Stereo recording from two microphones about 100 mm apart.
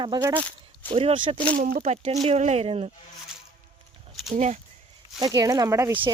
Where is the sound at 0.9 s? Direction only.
65° right (ahead or behind).